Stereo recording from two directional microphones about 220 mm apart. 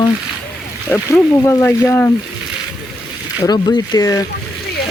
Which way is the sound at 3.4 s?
20° left (ahead or behind).